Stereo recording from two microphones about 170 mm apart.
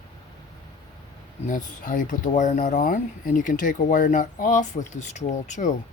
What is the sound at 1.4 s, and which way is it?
Speech, 50° left (ahead or behind).